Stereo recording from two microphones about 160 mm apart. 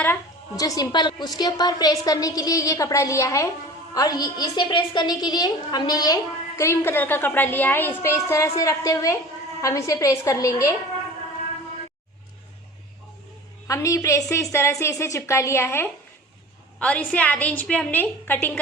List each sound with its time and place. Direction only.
0.0 s a woman's voice: 20° left (ahead or behind)
13.7 s a woman's voice: 20° left (ahead or behind)